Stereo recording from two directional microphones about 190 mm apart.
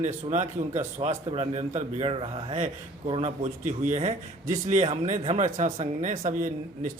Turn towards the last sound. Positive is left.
turn(degrees=-40)  # may be behind; listen again after turning